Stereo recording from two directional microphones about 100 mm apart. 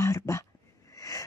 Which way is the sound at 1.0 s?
35° left (ahead or behind).